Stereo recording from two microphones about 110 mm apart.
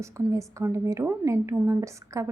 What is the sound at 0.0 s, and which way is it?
A woman's voice, 25° right (ahead or behind).